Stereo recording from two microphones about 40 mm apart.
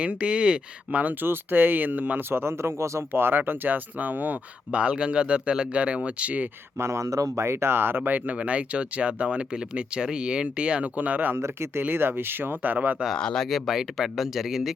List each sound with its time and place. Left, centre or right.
0.0 s speech: right
0.9 s speech: right
1.2 s speech: right
2.3 s speech: right
4.7 s speech: right
7.4 s speech: right
8.4 s speech: right
10.9 s speech: right
11.3 s speech: right
11.8 s speech: right
13.1 s speech: centre
13.5 s speech: centre